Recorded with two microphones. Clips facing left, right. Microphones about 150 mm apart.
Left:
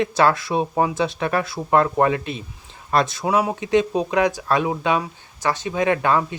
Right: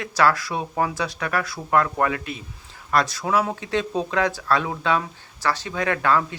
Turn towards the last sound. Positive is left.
turn(degrees=20)  # may be behind; listen again after turning